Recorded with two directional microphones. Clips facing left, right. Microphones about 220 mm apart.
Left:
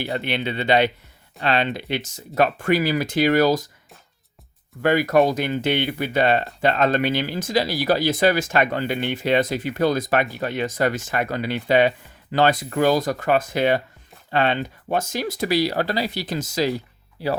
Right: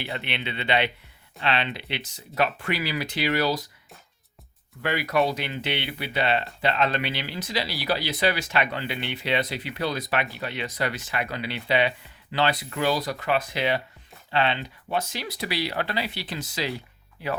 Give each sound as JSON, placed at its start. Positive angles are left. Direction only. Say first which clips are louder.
{"t": 0.0, "sound": "speech", "louder": "left 7 dB", "side_deg": 40}
{"t": 4.8, "sound": "speech", "louder": "left 7 dB", "side_deg": 45}